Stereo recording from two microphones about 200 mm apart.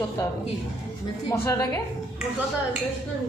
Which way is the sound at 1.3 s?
15° left (ahead or behind).